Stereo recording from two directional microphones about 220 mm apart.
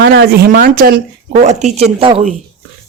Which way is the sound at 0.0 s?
50° right (ahead or behind).